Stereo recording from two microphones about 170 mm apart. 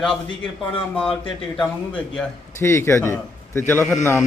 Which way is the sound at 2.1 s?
15° left (ahead or behind).